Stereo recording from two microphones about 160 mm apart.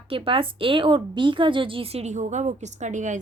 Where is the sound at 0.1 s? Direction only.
35° right (ahead or behind).